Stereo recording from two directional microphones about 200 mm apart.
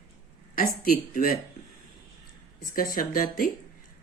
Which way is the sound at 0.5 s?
45° left (ahead or behind).